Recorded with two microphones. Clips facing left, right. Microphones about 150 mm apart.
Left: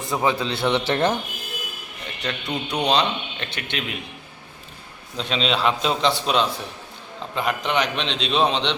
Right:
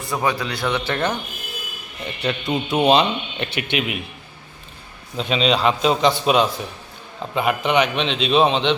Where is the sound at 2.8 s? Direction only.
10° right (ahead or behind).